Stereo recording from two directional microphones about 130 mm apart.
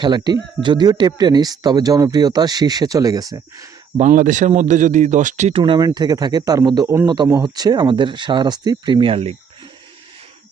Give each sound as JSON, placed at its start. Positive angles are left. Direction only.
{"t": 0.0, "sound": "speech", "side_deg": -35}
{"t": 3.9, "sound": "speech", "side_deg": -80}
{"t": 5.5, "sound": "speech", "side_deg": -40}
{"t": 5.8, "sound": "speech", "side_deg": -30}